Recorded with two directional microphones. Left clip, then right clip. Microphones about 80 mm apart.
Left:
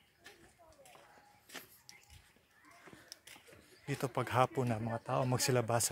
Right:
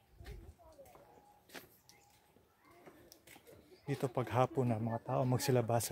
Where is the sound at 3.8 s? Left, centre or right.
Right.